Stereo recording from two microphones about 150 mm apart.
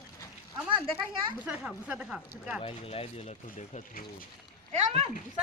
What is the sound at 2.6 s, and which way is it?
Speech, 40° left (ahead or behind).